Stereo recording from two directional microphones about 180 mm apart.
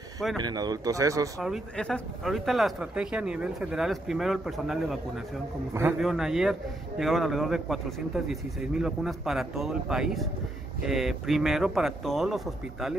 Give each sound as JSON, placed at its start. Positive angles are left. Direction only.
{"t": 0.4, "sound": "speech", "side_deg": -20}
{"t": 1.4, "sound": "speech", "side_deg": 0}
{"t": 5.7, "sound": "a man's voice", "side_deg": -15}
{"t": 5.9, "sound": "speech", "side_deg": 0}